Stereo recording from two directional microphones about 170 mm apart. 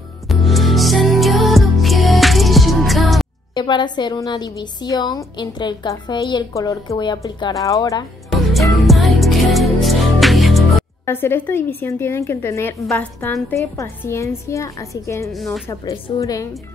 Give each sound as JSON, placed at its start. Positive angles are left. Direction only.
{"t": 0.3, "sound": "music", "side_deg": 0}
{"t": 3.5, "sound": "a woman's voice", "side_deg": 25}
{"t": 8.7, "sound": "music", "side_deg": 0}
{"t": 11.1, "sound": "a woman's voice", "side_deg": 15}